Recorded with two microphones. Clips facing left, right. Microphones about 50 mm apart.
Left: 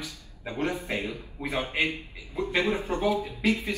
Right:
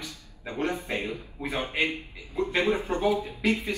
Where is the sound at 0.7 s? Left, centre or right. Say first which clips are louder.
Even; right.